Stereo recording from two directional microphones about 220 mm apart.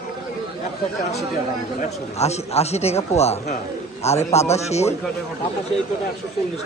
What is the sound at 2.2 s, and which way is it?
A man's voice, 30° left (ahead or behind).